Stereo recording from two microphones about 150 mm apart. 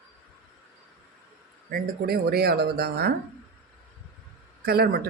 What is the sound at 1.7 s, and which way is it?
Speech, 90° right.